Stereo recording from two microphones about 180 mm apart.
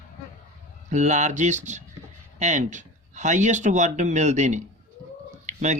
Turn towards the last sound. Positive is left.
turn(degrees=-40)  # may be behind; listen again after turning